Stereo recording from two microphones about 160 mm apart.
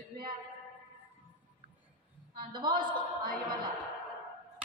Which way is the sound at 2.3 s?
30° right (ahead or behind).